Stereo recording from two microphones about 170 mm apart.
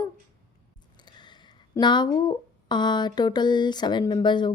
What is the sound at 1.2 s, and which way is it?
Speech, 25° left (ahead or behind).